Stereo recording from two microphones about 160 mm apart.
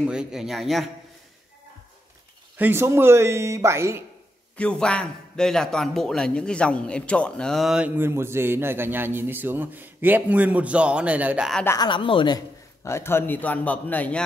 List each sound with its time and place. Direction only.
0.0 s a man's voice: 5° right (ahead or behind)
2.5 s a man's voice: 15° right (ahead or behind)
4.6 s a man's voice: 5° left (ahead or behind)
11.6 s speech: 20° left (ahead or behind)
11.9 s a man's voice: 30° left (ahead or behind); by 14.2 s 10° left (ahead or behind)